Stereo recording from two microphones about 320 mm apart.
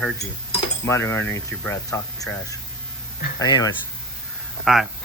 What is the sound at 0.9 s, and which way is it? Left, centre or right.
Speech, centre.